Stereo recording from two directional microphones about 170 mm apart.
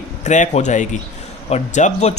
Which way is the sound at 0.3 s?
45° left (ahead or behind).